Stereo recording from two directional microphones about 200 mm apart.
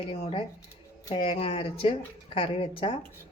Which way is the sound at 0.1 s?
25° left (ahead or behind).